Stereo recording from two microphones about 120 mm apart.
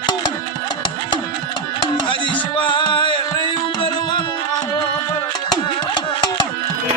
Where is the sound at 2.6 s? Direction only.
40° left (ahead or behind).